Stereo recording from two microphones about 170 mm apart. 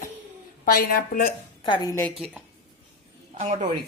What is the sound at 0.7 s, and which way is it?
Speech, 60° left (ahead or behind).